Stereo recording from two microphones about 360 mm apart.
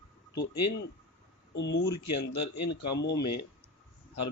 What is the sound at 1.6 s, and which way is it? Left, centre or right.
Speech, left.